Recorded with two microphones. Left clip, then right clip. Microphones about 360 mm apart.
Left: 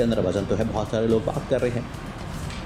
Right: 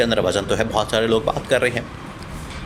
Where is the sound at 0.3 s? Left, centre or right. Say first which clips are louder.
Right 5 dB; right.